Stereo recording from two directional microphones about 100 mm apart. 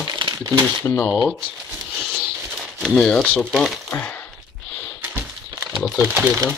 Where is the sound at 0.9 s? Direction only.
20° left (ahead or behind).